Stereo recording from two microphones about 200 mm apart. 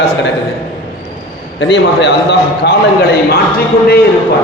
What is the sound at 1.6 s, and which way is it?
Speech, 60° left (ahead or behind).